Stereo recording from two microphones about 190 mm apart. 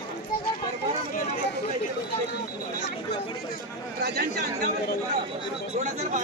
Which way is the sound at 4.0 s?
60° right (ahead or behind).